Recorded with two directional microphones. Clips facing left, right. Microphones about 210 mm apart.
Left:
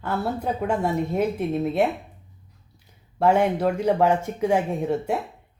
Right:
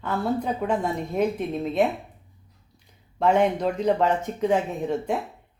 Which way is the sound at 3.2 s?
10° left (ahead or behind).